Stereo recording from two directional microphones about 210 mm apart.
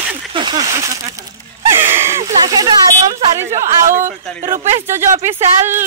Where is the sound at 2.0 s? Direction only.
15° right (ahead or behind).